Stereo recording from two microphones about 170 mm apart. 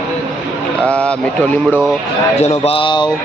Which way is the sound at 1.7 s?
5° right (ahead or behind).